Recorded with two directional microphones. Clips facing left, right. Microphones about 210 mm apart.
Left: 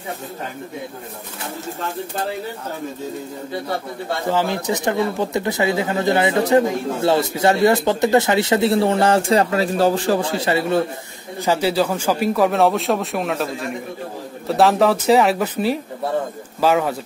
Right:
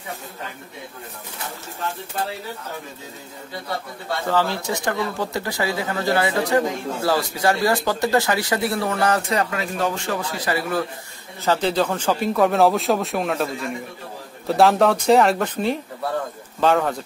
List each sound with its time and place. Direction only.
4.3 s speech: 15° left (ahead or behind)
11.4 s speech: 10° left (ahead or behind)
14.5 s speech: centre (ahead or behind)